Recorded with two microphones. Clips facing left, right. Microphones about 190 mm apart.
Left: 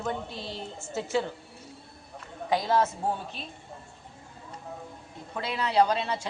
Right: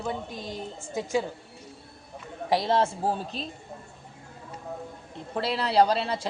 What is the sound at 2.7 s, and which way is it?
Speech, 30° right (ahead or behind).